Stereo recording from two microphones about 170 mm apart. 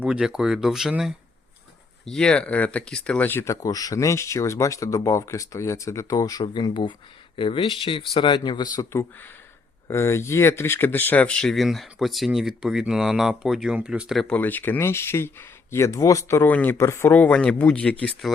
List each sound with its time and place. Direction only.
0.0 s speech: 5° right (ahead or behind)